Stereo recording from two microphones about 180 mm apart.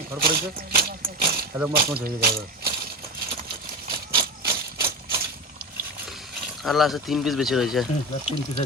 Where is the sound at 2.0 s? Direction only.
55° right (ahead or behind).